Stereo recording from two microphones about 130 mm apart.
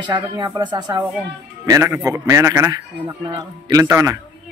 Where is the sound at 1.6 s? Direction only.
20° right (ahead or behind).